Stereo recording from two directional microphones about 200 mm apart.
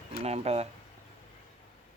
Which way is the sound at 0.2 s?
30° right (ahead or behind).